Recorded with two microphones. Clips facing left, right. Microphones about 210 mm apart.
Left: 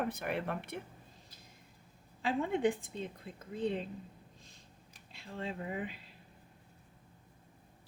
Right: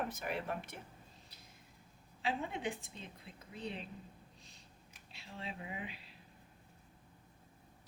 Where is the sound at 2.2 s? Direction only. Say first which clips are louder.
Left 7 dB; 50° left (ahead or behind).